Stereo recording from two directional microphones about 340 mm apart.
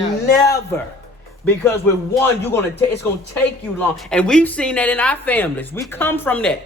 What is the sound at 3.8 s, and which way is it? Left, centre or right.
A man's voice, centre.